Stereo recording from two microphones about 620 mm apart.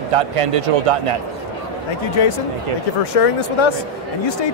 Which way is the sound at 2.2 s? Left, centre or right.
Left.